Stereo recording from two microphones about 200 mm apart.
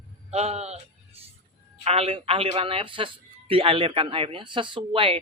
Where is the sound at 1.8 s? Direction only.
30° right (ahead or behind).